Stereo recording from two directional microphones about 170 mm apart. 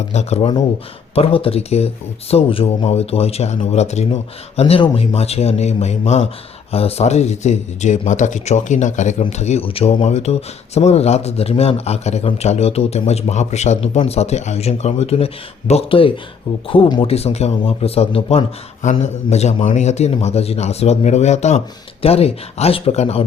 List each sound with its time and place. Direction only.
0.1 s speech: 40° left (ahead or behind)